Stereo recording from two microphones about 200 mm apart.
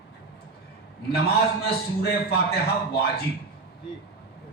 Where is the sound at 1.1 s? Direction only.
50° left (ahead or behind).